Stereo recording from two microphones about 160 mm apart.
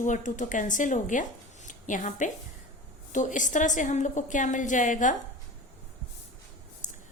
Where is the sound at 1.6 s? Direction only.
50° left (ahead or behind).